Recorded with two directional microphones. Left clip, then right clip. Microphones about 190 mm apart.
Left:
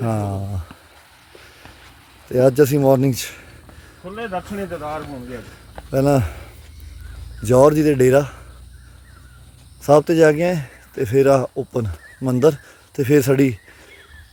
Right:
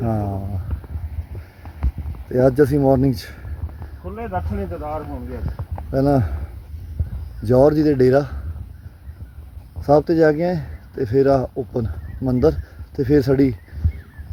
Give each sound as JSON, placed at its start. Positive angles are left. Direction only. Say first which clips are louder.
{"t": 0.0, "sound": "speech", "louder": "left 1 dB", "side_deg": 15}
{"t": 2.3, "sound": "speech", "louder": "left 1 dB", "side_deg": 10}
{"t": 4.1, "sound": "speech", "louder": "even", "side_deg": 45}
{"t": 4.7, "sound": "speech", "louder": "even", "side_deg": 35}
{"t": 5.9, "sound": "speech", "louder": "left 1 dB", "side_deg": 15}
{"t": 7.4, "sound": "speech", "louder": "left 2 dB", "side_deg": 15}
{"t": 9.8, "sound": "speech", "louder": "left 2 dB", "side_deg": 15}